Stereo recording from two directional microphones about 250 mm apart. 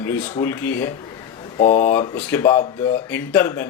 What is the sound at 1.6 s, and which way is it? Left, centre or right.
Speech, left.